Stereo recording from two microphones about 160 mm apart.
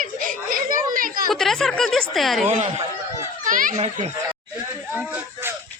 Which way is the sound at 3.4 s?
55° right (ahead or behind).